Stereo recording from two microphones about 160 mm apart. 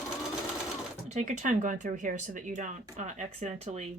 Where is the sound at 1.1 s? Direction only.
50° right (ahead or behind).